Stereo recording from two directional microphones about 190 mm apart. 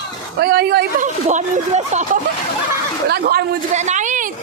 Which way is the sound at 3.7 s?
40° right (ahead or behind).